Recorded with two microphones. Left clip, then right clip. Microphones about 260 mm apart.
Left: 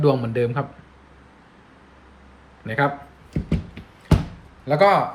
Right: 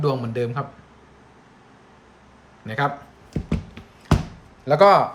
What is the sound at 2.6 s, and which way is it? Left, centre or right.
Speech, centre.